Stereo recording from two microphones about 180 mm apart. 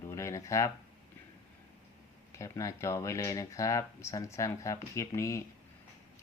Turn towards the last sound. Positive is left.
turn(degrees=15)  # may be behind; listen again after turning